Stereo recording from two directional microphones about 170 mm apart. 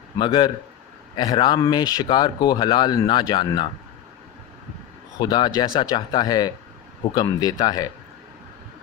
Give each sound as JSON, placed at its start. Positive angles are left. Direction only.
{"t": 0.2, "sound": "speech", "side_deg": 30}
{"t": 5.2, "sound": "speech", "side_deg": 25}